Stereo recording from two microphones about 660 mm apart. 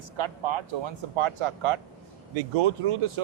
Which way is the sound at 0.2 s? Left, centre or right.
Right.